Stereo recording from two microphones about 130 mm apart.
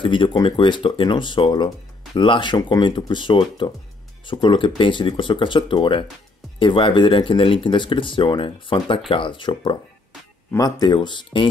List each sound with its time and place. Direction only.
0.0 s speech: 40° left (ahead or behind)